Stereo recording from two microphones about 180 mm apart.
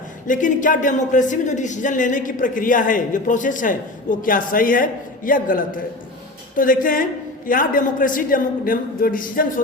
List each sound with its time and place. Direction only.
0.3 s speech: 45° left (ahead or behind)